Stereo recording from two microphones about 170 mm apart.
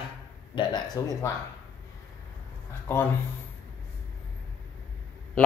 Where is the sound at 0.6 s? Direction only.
25° left (ahead or behind).